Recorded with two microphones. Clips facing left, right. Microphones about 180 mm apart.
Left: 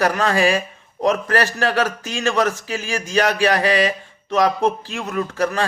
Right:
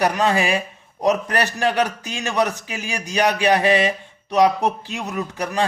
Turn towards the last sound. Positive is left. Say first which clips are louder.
# left 3 dB
turn(degrees=-15)  # may be behind; listen again after turning